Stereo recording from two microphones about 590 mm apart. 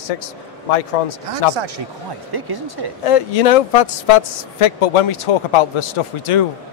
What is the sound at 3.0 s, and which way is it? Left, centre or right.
Speech, left.